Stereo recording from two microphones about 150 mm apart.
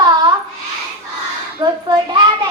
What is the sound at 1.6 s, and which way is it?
Speech, 30° right (ahead or behind).